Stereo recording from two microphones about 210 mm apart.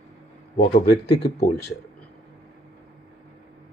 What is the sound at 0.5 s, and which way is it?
Speech, 45° left (ahead or behind).